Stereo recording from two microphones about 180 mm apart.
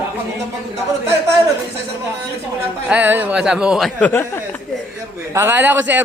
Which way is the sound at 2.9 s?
10° right (ahead or behind).